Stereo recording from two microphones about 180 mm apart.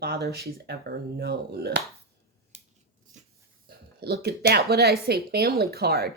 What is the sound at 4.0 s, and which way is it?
Speech, 60° right (ahead or behind).